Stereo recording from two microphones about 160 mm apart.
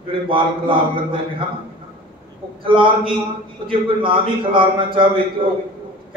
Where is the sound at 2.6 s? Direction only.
30° right (ahead or behind).